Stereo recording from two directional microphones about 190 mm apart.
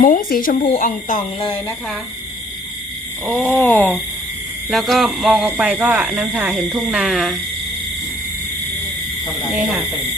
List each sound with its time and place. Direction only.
0.0 s speech: 50° left (ahead or behind)
3.5 s speech: 10° left (ahead or behind)
9.6 s speech: 5° right (ahead or behind)